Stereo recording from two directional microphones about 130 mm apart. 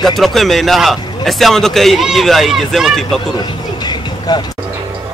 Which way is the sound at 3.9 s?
35° left (ahead or behind).